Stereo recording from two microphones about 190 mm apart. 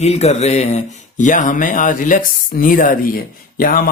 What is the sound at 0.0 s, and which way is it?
Speech, 35° left (ahead or behind).